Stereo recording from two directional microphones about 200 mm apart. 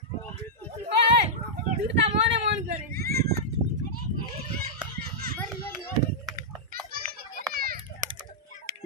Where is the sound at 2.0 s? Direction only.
60° right (ahead or behind).